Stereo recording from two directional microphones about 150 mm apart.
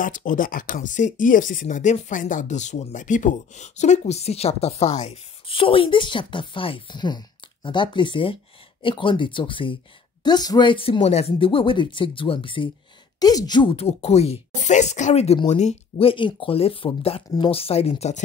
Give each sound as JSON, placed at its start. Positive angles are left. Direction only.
{"t": 0.0, "sound": "speech", "side_deg": 60}